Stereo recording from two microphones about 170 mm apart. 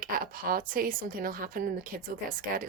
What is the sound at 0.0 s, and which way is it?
A woman's voice, 55° right (ahead or behind).